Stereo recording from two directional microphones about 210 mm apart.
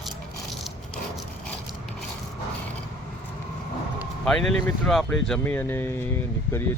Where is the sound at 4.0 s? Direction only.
Centre (ahead or behind).